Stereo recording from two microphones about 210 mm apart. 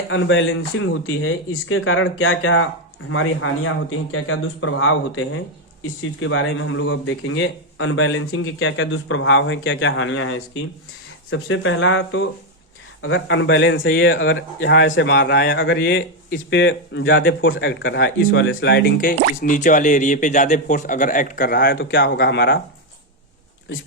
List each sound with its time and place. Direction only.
0.1 s a man's voice: 65° left (ahead or behind)